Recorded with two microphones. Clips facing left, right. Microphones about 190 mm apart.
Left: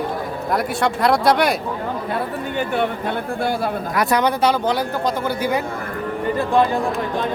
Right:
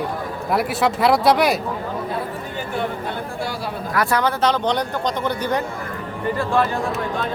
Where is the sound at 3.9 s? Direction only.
15° left (ahead or behind).